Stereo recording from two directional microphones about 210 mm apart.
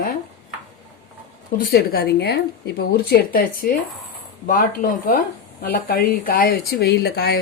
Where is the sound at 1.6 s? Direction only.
45° left (ahead or behind).